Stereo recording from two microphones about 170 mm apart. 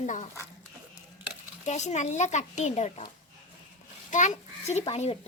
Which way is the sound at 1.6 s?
45° left (ahead or behind).